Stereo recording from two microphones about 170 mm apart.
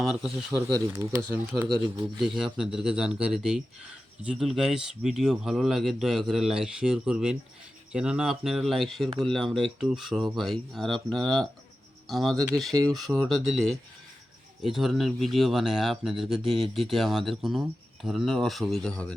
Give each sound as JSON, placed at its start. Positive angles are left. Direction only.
{"t": 0.0, "sound": "speech", "side_deg": 0}
{"t": 0.5, "sound": "speech", "side_deg": -20}
{"t": 2.1, "sound": "speech", "side_deg": 0}